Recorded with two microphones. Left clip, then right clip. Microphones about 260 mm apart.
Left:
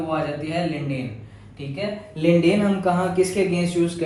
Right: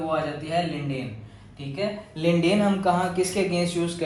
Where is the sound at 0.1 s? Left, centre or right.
Centre.